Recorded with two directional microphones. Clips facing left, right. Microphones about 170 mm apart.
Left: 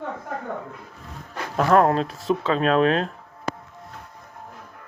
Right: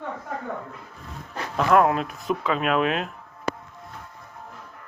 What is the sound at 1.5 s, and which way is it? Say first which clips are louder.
Speech: left 2 dB; 40° left (ahead or behind).